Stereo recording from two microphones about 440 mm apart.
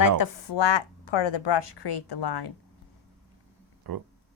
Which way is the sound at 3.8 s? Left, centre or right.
Right.